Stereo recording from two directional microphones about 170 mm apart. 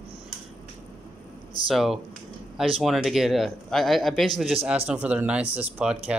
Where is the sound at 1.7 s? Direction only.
Centre (ahead or behind).